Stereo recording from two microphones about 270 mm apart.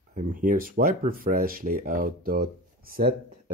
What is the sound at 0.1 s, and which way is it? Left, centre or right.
Speech, right.